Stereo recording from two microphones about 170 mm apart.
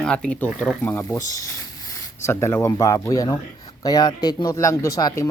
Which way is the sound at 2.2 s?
15° left (ahead or behind).